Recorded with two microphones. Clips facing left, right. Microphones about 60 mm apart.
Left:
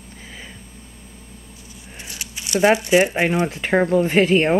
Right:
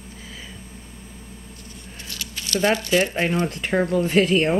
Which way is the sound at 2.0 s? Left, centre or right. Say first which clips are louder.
Even; centre.